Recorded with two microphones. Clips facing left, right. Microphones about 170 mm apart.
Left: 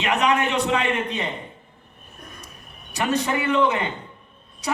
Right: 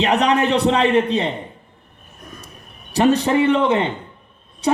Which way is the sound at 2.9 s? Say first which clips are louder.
Right 8 dB; 35° right (ahead or behind).